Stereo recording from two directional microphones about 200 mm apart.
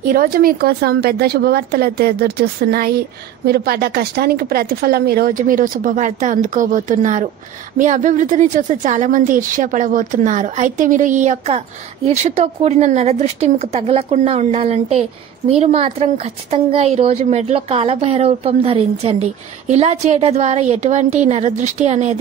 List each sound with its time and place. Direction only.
0.1 s a woman's voice: 45° right (ahead or behind)